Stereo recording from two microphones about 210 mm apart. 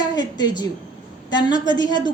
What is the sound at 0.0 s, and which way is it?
A woman's voice, 20° left (ahead or behind).